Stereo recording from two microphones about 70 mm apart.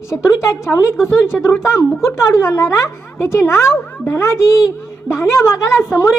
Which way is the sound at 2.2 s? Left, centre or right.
Left.